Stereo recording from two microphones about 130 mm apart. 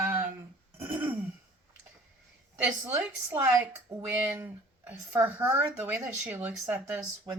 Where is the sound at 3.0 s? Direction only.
15° right (ahead or behind).